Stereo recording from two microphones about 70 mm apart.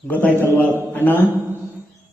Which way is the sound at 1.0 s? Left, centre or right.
Left.